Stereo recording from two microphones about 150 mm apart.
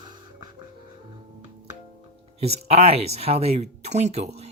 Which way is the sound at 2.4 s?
45° right (ahead or behind).